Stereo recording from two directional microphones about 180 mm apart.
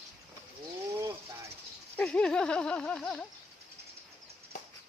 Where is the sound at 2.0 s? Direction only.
5° left (ahead or behind).